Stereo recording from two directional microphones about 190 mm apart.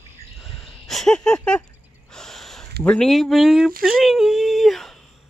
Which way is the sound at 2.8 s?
5° left (ahead or behind).